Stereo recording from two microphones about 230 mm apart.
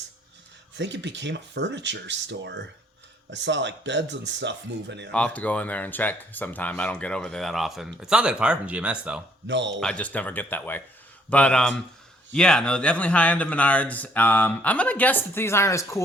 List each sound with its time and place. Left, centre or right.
0.8 s speech: right
5.1 s speech: centre
9.5 s speech: right
9.8 s speech: centre